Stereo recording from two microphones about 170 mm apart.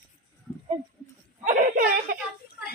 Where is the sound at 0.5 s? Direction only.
10° left (ahead or behind).